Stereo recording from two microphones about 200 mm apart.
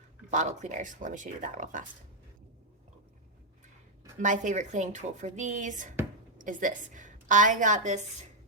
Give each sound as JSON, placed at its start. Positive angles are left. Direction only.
{"t": 0.3, "sound": "speech", "side_deg": -35}
{"t": 4.2, "sound": "a woman's voice", "side_deg": -40}